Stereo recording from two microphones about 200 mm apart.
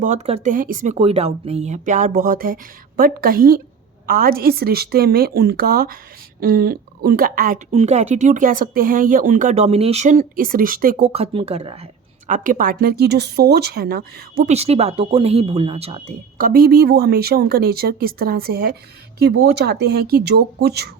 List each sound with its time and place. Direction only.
0.0 s speech: 35° right (ahead or behind)
0.9 s speech: 30° right (ahead or behind)
12.3 s speech: 40° right (ahead or behind)
14.5 s speech: 30° right (ahead or behind)
16.4 s speech: 45° right (ahead or behind)